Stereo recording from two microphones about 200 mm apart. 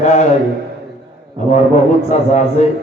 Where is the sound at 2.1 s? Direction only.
35° left (ahead or behind).